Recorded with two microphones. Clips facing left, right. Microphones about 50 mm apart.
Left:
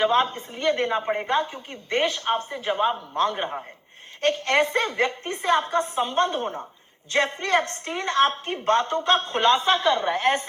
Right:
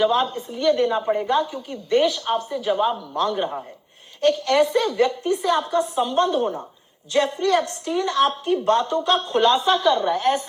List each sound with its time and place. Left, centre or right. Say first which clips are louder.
0.0 s a woman's voice: right 1 dB; left